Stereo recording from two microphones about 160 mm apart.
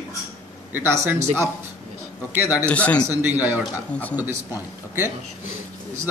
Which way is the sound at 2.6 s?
10° left (ahead or behind).